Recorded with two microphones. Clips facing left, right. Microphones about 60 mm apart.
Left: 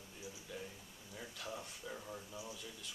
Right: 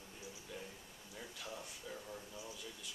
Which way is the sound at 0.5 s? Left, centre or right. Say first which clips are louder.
Left 2 dB; centre.